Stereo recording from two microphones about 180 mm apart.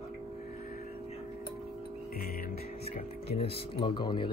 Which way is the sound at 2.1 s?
55° left (ahead or behind).